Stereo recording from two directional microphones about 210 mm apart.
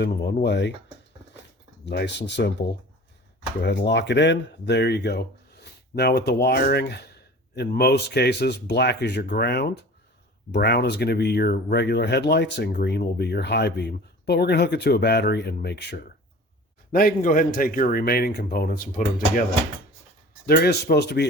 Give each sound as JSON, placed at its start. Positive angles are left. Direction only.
{"t": 0.0, "sound": "speech", "side_deg": 55}
{"t": 1.8, "sound": "speech", "side_deg": 55}
{"t": 20.5, "sound": "speech", "side_deg": 50}